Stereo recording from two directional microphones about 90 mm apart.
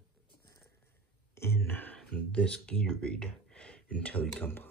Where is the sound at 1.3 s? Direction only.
25° left (ahead or behind).